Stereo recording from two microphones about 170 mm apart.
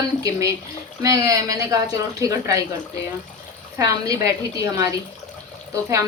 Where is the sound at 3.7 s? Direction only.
20° right (ahead or behind).